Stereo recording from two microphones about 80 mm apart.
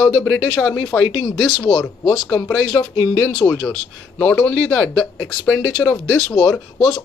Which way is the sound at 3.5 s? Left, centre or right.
Centre.